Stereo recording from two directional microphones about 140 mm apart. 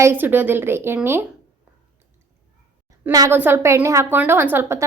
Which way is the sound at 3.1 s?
25° right (ahead or behind).